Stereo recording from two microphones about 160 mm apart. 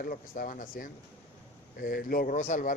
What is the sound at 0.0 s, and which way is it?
Speech, 55° left (ahead or behind).